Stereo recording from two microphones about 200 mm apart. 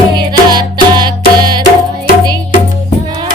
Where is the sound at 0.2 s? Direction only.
20° right (ahead or behind).